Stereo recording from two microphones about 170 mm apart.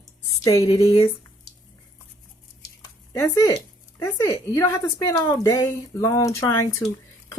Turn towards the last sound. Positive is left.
turn(degrees=20)  # may be behind; listen again after turning